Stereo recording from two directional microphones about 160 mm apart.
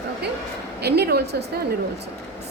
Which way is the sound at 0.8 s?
90° right.